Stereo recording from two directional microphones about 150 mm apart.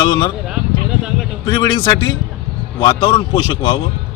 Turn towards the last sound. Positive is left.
turn(degrees=35)  # may be behind; listen again after turning